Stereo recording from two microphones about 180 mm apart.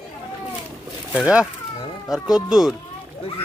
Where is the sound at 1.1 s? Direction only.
5° right (ahead or behind).